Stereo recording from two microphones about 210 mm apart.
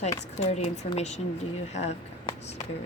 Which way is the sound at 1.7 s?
30° left (ahead or behind).